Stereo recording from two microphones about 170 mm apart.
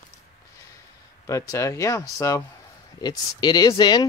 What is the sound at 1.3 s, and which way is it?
Speech, 20° left (ahead or behind).